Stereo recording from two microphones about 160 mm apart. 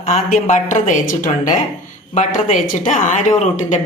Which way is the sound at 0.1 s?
55° left (ahead or behind).